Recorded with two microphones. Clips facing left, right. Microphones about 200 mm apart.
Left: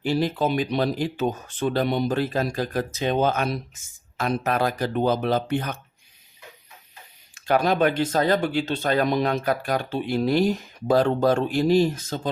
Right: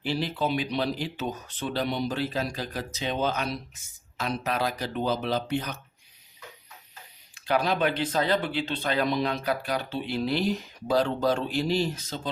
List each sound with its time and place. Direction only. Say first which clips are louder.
0.0 s speech: left 5 dB; 45° left (ahead or behind)
7.3 s speech: left 5 dB; 45° left (ahead or behind)